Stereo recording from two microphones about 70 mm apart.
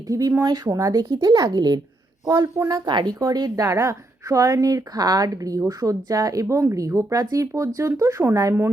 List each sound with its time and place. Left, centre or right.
0.1 s a woman's voice: right
0.4 s speech: right
1.5 s a child's voice: right
2.2 s speech: right
2.8 s speech: right
3.2 s a woman's voice: right